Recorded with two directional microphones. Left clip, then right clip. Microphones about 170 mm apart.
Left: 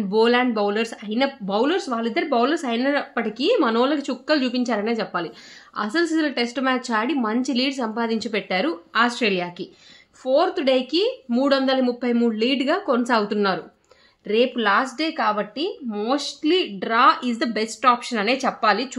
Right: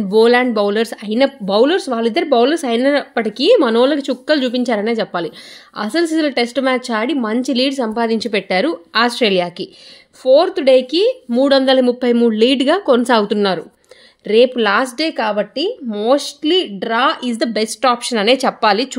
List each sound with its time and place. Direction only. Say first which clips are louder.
0.1 s speech: right 7 dB; 35° right (ahead or behind)